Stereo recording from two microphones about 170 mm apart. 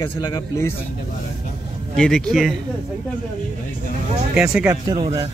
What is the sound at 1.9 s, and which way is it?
Speech, 5° left (ahead or behind).